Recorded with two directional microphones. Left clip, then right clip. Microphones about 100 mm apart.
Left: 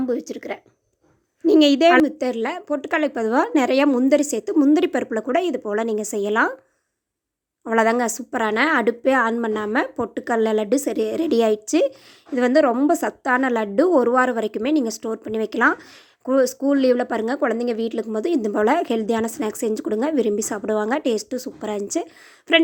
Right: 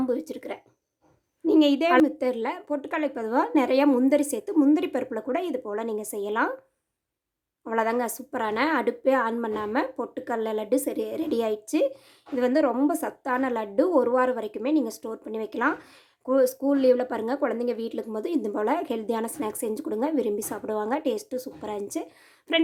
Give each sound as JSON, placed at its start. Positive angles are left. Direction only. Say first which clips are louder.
{"t": 0.0, "sound": "speech", "louder": "left 3 dB", "side_deg": 25}
{"t": 1.5, "sound": "a woman's voice", "louder": "left 6 dB", "side_deg": 50}
{"t": 2.9, "sound": "a woman's voice", "louder": "left 6 dB", "side_deg": 45}
{"t": 7.6, "sound": "a woman's voice", "louder": "left 7 dB", "side_deg": 45}